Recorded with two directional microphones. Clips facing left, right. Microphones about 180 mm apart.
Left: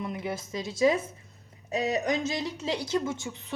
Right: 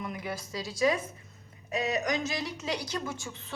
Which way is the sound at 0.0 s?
25° left (ahead or behind).